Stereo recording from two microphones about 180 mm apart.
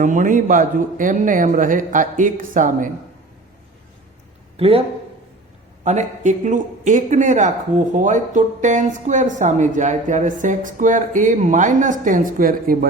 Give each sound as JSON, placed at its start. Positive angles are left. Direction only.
{"t": 0.0, "sound": "speech", "side_deg": -45}
{"t": 4.5, "sound": "speech", "side_deg": -35}
{"t": 5.8, "sound": "speech", "side_deg": -40}